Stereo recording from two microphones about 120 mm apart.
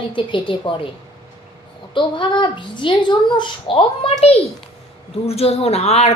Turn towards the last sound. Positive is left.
turn(degrees=65)  # may be behind; listen again after turning